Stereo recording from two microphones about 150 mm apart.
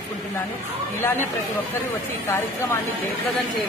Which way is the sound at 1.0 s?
15° left (ahead or behind).